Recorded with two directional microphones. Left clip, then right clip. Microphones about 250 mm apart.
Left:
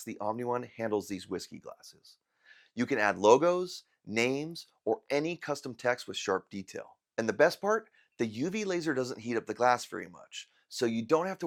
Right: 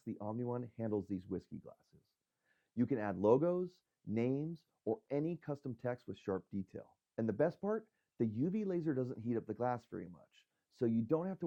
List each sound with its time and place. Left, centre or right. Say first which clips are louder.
0.2 s speech: left 11 dB; centre
4.8 s speech: left 8 dB; left
5.0 s speech: left 8 dB; centre
7.6 s speech: left 10 dB; centre
8.2 s speech: left 5 dB; centre
10.3 s speech: left 11 dB; centre